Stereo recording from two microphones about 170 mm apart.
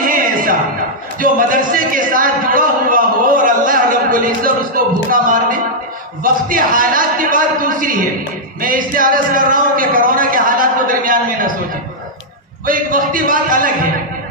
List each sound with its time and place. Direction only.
0.0 s music: 55° right (ahead or behind)
1.2 s a sound: 50° right (ahead or behind)
12.6 s a man's voice: 50° right (ahead or behind)